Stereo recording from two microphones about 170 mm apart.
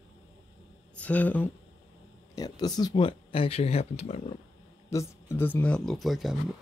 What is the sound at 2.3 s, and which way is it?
Speech, 20° left (ahead or behind).